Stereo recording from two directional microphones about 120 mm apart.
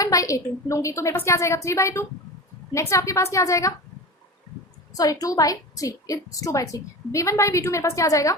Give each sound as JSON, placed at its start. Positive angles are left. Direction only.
{"t": 0.0, "sound": "a woman's voice", "side_deg": 30}
{"t": 5.2, "sound": "a woman's voice", "side_deg": 30}